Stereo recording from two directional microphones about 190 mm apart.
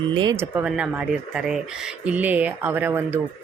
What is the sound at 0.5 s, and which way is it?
Speech, 5° right (ahead or behind).